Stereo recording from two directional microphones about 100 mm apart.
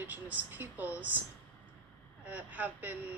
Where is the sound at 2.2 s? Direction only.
15° right (ahead or behind).